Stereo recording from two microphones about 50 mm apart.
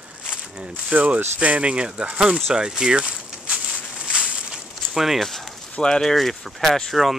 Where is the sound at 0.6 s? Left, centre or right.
Right.